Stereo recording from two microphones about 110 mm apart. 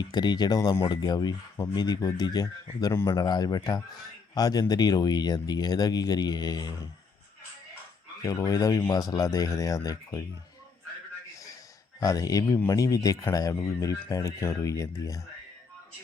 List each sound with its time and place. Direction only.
0.0 s speech: 40° left (ahead or behind)
2.9 s a man's voice: 25° left (ahead or behind)
3.2 s speech: 40° left (ahead or behind)
8.2 s speech: 30° left (ahead or behind)
11.9 s speech: 30° left (ahead or behind)